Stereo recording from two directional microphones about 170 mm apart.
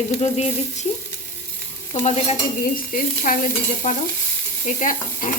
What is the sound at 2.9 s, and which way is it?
Frying, 55° left (ahead or behind).